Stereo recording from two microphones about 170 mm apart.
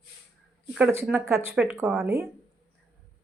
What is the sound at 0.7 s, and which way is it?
Speech, 10° right (ahead or behind).